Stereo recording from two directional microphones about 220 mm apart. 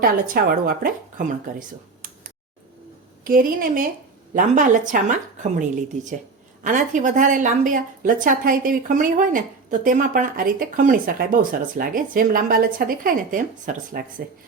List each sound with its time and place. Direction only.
0.0 s a woman's voice: 40° right (ahead or behind)
6.7 s speech: 35° right (ahead or behind)